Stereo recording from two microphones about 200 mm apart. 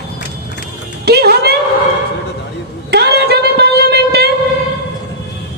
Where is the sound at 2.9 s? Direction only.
55° right (ahead or behind).